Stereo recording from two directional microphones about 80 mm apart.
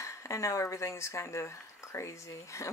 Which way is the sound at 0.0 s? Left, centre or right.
Left.